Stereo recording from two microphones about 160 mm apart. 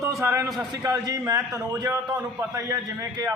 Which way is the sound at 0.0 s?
20° right (ahead or behind).